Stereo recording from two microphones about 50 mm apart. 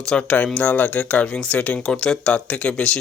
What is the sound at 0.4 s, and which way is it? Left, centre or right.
Speech, left.